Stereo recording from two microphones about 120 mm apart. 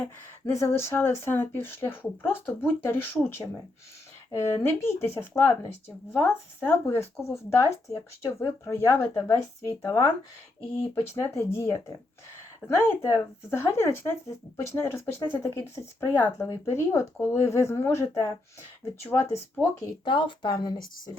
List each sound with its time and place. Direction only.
0.4 s speech: 20° left (ahead or behind)
20.1 s speech: 40° left (ahead or behind)